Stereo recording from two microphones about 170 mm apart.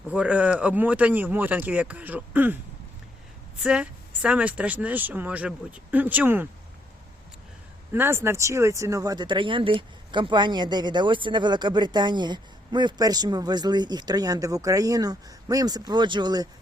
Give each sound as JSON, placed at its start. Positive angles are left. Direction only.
{"t": 0.1, "sound": "speech", "side_deg": -5}
{"t": 3.6, "sound": "speech", "side_deg": -5}
{"t": 7.9, "sound": "speech", "side_deg": -15}